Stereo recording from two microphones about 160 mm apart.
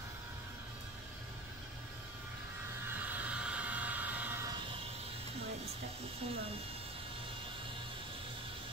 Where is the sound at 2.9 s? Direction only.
10° right (ahead or behind).